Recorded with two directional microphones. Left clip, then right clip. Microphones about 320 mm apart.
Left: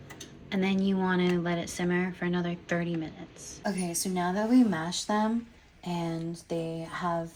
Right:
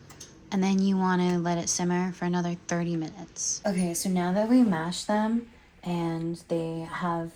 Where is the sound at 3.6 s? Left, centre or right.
Right.